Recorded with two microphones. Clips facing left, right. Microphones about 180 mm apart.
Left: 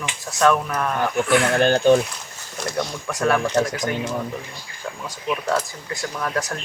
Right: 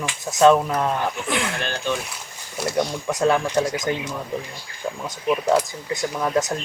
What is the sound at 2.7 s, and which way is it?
Speech, 20° right (ahead or behind).